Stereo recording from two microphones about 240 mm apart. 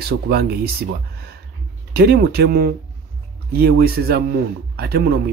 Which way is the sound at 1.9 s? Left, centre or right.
Right.